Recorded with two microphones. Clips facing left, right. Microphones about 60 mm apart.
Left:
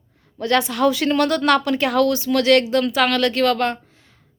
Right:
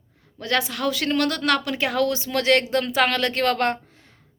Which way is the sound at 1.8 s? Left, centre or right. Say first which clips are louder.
Left 4 dB; centre.